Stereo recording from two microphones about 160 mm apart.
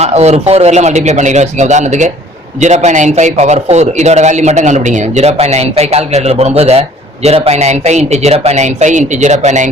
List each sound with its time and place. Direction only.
0.0 s a man's voice: 40° right (ahead or behind)